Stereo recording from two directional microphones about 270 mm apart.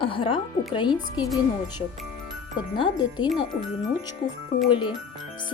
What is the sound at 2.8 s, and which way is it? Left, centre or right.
Speech, centre.